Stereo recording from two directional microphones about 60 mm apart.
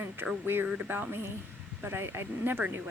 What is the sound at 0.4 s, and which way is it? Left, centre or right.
Speech, right.